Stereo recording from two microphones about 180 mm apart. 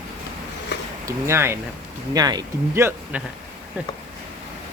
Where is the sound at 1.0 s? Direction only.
15° right (ahead or behind).